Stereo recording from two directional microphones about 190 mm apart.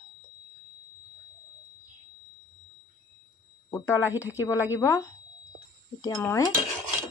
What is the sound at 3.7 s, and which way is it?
Speech, 15° left (ahead or behind).